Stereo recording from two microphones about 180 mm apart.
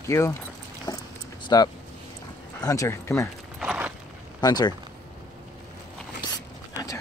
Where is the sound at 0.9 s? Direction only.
25° left (ahead or behind).